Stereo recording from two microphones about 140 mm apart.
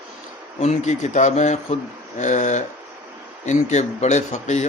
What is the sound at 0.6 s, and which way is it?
A man's voice, 55° left (ahead or behind).